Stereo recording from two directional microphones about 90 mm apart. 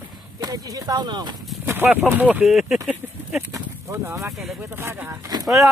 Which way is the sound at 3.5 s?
35° right (ahead or behind).